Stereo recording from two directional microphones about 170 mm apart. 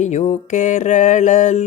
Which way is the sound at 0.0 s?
40° left (ahead or behind).